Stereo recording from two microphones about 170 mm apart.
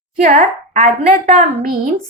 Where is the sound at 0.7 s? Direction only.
45° right (ahead or behind).